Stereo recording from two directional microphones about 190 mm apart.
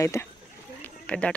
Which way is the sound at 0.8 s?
5° left (ahead or behind).